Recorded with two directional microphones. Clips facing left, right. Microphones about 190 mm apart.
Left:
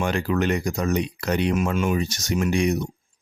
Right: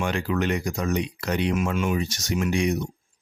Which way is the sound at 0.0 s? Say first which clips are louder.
Left 2 dB; 40° left (ahead or behind).